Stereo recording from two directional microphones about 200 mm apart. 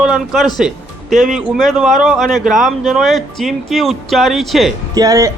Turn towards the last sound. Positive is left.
turn(degrees=-20)  # may be behind; listen again after turning